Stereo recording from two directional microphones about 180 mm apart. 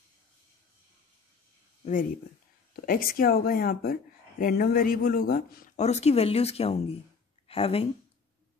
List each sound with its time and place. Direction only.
2.7 s speech: 55° left (ahead or behind)
5.8 s speech: 35° left (ahead or behind)